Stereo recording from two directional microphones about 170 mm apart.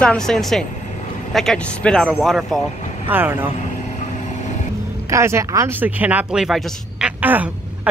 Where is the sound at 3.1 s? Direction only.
10° right (ahead or behind).